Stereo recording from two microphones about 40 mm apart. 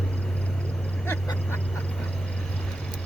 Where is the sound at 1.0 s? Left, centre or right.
Left.